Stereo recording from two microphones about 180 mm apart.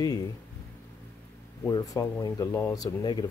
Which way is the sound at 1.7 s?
20° left (ahead or behind).